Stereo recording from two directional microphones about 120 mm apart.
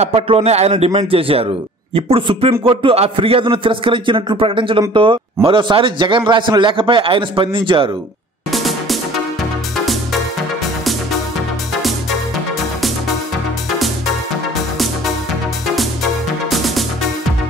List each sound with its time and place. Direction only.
0.0 s a man's voice: 55° right (ahead or behind)
8.5 s music: centre (ahead or behind)
15.6 s music: centre (ahead or behind)